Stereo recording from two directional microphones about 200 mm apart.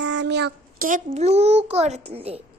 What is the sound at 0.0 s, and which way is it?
Child singing, 65° right (ahead or behind).